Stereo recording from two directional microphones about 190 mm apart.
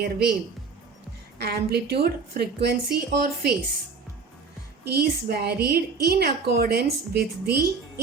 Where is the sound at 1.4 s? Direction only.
55° right (ahead or behind).